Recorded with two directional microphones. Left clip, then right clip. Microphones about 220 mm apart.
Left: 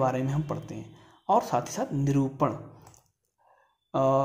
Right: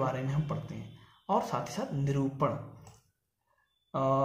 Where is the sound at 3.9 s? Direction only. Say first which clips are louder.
Left 5 dB; 45° left (ahead or behind).